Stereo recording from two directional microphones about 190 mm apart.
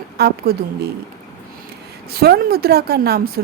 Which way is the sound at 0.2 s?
55° right (ahead or behind).